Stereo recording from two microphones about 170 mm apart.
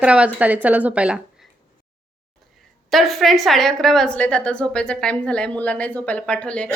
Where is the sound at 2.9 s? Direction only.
Centre (ahead or behind).